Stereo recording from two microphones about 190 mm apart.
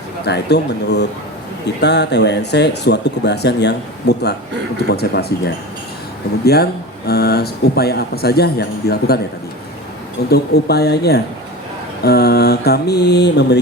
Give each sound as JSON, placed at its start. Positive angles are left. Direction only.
{"t": 0.3, "sound": "speech", "side_deg": 60}
{"t": 6.4, "sound": "speech", "side_deg": 55}
{"t": 10.2, "sound": "speech", "side_deg": 60}